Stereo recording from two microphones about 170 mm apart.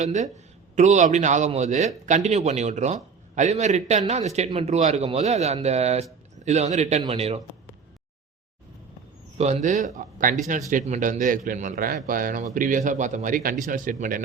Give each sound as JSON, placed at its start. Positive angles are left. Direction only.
{"t": 0.0, "sound": "a man's voice", "side_deg": -45}
{"t": 9.4, "sound": "a man's voice", "side_deg": -40}